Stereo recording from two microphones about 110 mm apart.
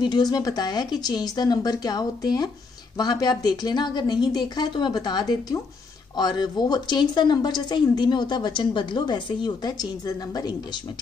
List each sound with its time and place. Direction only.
0.0 s a woman's voice: 40° left (ahead or behind)